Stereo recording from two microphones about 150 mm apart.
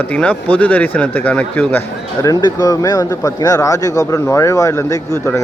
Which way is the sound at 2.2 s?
25° left (ahead or behind).